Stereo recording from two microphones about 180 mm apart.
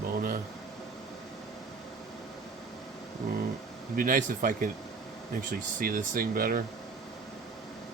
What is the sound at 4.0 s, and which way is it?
Speech, 50° right (ahead or behind).